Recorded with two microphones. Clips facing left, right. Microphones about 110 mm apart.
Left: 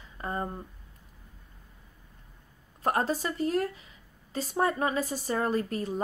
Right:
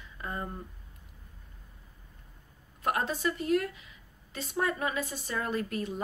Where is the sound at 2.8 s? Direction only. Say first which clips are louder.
Left 3 dB; 35° left (ahead or behind).